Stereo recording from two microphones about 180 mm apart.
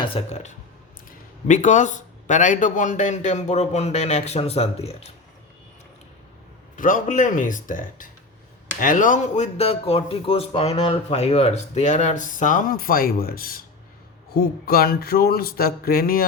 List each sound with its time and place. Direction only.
0.0 s speech: 35° left (ahead or behind)
6.7 s speech: 50° left (ahead or behind)
14.3 s a sound: 55° left (ahead or behind)